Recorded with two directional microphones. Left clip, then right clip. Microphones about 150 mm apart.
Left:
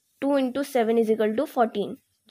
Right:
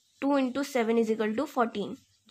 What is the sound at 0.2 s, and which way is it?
Speech, 25° left (ahead or behind).